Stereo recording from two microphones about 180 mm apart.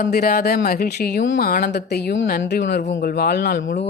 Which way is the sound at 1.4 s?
55° left (ahead or behind).